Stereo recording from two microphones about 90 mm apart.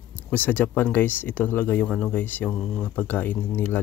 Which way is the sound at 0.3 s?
20° left (ahead or behind).